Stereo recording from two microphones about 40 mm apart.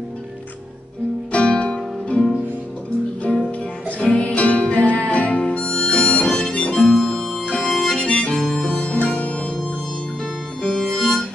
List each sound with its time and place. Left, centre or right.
1.3 s music: left
4.1 s music: left
5.4 s music: left
5.8 s harmonica: left
6.2 s harmonica: centre
6.5 s harmonica: left
6.8 s harmonica: centre
7.4 s harmonica: centre
8.6 s music: left
10.6 s harmonica: centre